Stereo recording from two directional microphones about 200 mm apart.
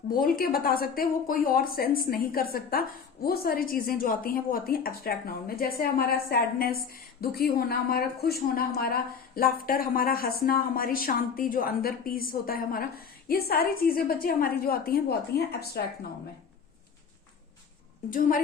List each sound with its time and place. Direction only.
0.1 s a woman's voice: 45° left (ahead or behind)